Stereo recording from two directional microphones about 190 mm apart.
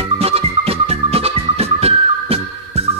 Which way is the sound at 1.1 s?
30° right (ahead or behind).